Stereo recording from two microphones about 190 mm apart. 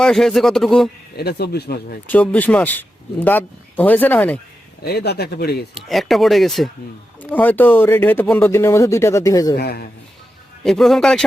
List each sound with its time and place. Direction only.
0.0 s speech: centre (ahead or behind)
1.1 s speech: 60° left (ahead or behind)
2.0 s speech: 10° left (ahead or behind)
4.8 s speech: 55° left (ahead or behind)
5.7 s speech: centre (ahead or behind); by 9.6 s 20° left (ahead or behind)
9.6 s speech: 55° left (ahead or behind)
10.6 s speech: centre (ahead or behind)